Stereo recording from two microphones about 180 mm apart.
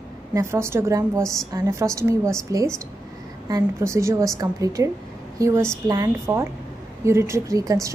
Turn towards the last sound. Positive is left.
turn(degrees=-20)  # may be behind; listen again after turning